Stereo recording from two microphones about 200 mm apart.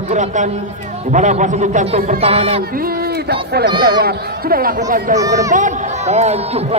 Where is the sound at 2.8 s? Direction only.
50° right (ahead or behind); by 6.8 s 30° right (ahead or behind).